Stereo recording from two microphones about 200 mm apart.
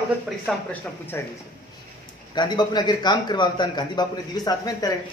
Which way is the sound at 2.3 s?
20° left (ahead or behind).